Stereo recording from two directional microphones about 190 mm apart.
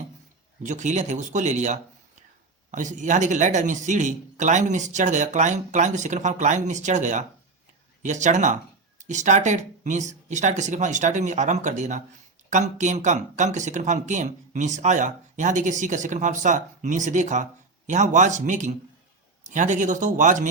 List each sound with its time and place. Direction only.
0.6 s speech: 40° right (ahead or behind)